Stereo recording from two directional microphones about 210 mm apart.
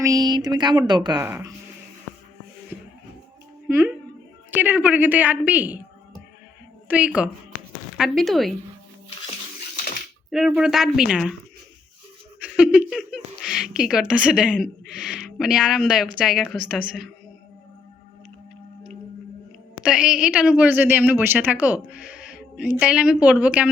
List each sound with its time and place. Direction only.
0.0 s speech: 15° right (ahead or behind)
3.7 s a woman's voice: 10° right (ahead or behind)
6.8 s a woman's voice: 5° right (ahead or behind)
10.3 s a woman's voice: centre (ahead or behind)
12.4 s a woman's voice: 5° right (ahead or behind)
19.8 s a woman's voice: 5° right (ahead or behind)